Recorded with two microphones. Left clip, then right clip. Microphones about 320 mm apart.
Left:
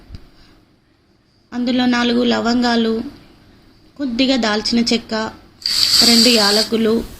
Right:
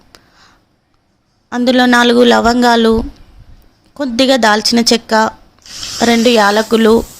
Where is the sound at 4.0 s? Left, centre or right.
Right.